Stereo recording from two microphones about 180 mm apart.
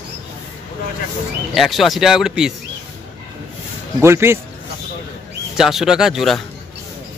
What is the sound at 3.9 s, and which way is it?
Speech, 15° right (ahead or behind).